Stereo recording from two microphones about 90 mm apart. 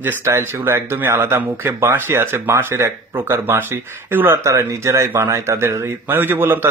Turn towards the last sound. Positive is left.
turn(degrees=-25)  # may be behind; listen again after turning